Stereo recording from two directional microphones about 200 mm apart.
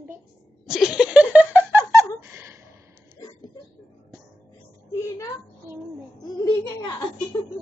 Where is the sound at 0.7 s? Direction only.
5° right (ahead or behind).